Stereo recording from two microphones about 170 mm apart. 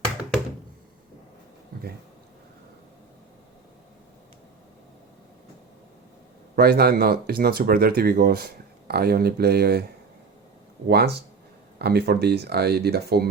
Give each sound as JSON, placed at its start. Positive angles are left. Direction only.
{"t": 6.6, "sound": "speech", "side_deg": -65}
{"t": 10.8, "sound": "speech", "side_deg": -70}